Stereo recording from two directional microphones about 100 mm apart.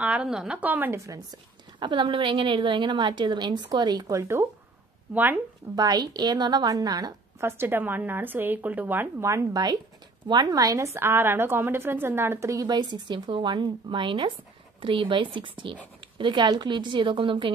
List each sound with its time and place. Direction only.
0.0 s a woman's voice: 15° right (ahead or behind)
1.0 s a woman's voice: 35° right (ahead or behind)
1.8 s a woman's voice: 50° right (ahead or behind); by 4.5 s 30° right (ahead or behind)
5.1 s a woman's voice: 20° right (ahead or behind)
5.8 s a woman's voice: 40° right (ahead or behind)
7.3 s a woman's voice: 25° right (ahead or behind)
12.6 s a woman's voice: 50° right (ahead or behind)